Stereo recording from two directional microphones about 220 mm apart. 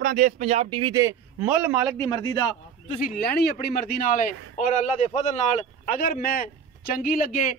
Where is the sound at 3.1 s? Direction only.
45° left (ahead or behind).